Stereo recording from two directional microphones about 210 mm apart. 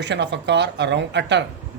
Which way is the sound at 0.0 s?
55° right (ahead or behind).